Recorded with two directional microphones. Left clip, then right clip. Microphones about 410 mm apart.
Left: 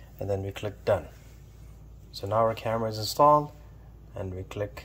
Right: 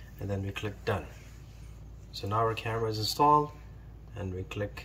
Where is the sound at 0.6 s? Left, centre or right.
Centre.